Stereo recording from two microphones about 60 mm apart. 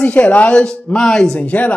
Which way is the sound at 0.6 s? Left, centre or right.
Centre.